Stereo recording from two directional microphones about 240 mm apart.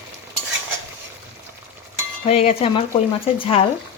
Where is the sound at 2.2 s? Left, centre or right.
Left.